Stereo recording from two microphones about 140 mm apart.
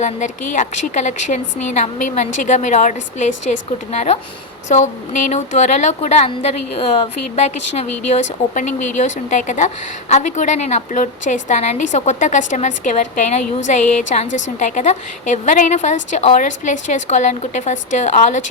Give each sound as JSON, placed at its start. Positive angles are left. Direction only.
{"t": 0.0, "sound": "speech", "side_deg": 60}